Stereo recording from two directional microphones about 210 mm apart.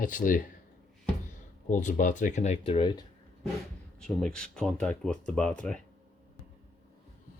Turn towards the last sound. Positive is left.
turn(degrees=5)  # may be behind; listen again after turning